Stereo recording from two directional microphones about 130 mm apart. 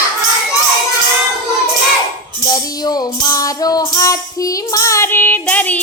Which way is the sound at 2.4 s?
30° left (ahead or behind).